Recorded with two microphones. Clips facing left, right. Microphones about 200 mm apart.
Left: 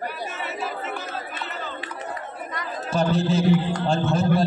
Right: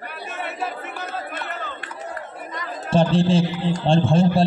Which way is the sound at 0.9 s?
55° right (ahead or behind).